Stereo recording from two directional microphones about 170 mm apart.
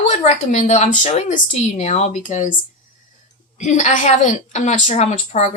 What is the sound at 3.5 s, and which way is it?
A woman's voice, 45° left (ahead or behind).